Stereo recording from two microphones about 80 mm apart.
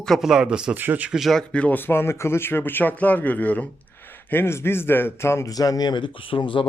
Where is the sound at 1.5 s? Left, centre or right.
Left.